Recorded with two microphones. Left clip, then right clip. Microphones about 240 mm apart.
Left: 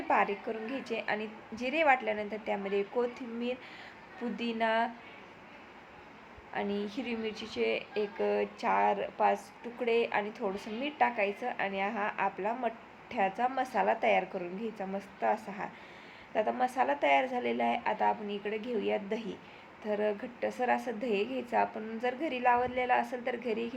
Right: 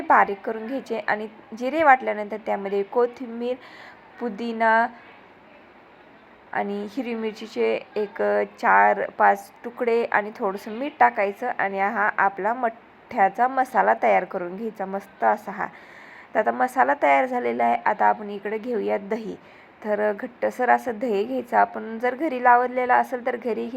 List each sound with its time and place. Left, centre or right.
0.1 s a woman's voice: right
6.5 s a woman's voice: right
9.1 s a woman's voice: right